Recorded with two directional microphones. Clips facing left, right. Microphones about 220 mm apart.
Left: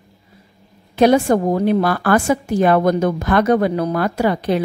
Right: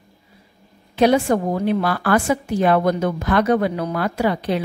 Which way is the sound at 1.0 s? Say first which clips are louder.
Left 3 dB; 45° left (ahead or behind).